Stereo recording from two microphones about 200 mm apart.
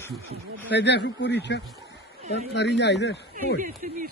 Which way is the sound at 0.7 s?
60° left (ahead or behind).